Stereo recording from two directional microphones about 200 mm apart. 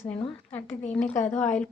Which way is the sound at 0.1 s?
25° left (ahead or behind).